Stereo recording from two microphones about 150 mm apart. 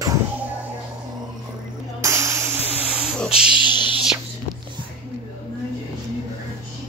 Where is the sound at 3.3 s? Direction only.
5° right (ahead or behind).